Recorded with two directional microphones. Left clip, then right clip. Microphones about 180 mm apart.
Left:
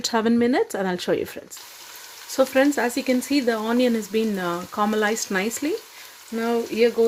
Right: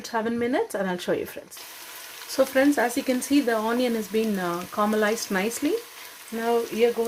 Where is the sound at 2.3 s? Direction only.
35° left (ahead or behind).